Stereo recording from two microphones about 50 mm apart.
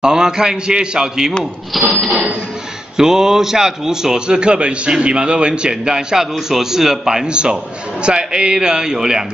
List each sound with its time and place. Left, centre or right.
0.0 s a man's voice: centre
1.7 s cash register: centre
2.0 s a man's voice: centre